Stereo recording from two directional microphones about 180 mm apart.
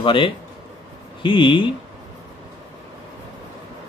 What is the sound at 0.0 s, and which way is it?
Speech, 30° left (ahead or behind).